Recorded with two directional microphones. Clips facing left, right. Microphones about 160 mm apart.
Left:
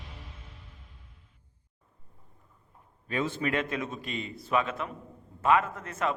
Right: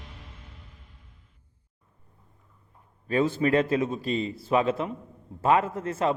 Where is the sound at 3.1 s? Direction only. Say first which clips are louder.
Right 7 dB; 35° right (ahead or behind).